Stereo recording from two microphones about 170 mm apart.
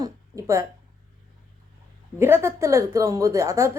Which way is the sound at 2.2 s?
15° right (ahead or behind).